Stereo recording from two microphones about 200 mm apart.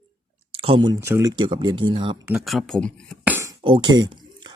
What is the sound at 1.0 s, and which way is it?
Speech, 15° right (ahead or behind).